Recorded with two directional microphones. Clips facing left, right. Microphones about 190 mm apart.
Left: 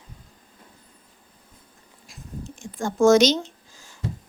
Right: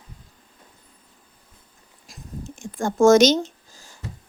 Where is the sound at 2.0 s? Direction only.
50° right (ahead or behind).